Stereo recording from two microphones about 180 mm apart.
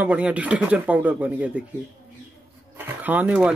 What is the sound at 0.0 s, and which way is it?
Speech, 5° right (ahead or behind).